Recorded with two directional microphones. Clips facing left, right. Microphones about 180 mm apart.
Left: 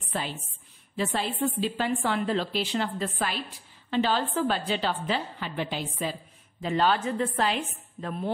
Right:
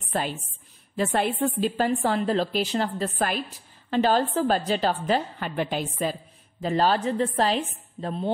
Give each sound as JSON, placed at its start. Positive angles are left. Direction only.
{"t": 0.1, "sound": "a woman's voice", "side_deg": -50}